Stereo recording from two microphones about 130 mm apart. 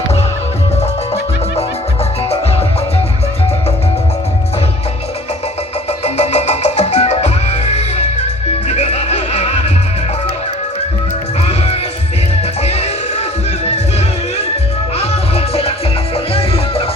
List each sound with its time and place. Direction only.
0.8 s music: 55° left (ahead or behind)
6.1 s music: 60° left (ahead or behind)
12.4 s music: 55° left (ahead or behind)
14.9 s music: 50° left (ahead or behind)